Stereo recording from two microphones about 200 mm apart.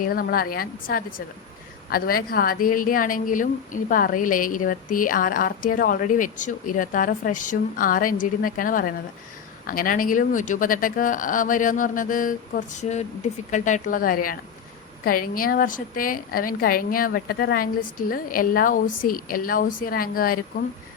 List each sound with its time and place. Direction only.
0.0 s a woman's voice: 45° left (ahead or behind)